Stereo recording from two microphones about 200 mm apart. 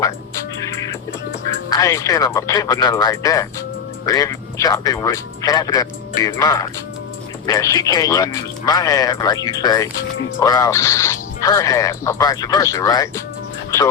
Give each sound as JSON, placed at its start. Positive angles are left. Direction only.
{"t": 0.6, "sound": "music", "side_deg": 15}
{"t": 1.7, "sound": "speech", "side_deg": 15}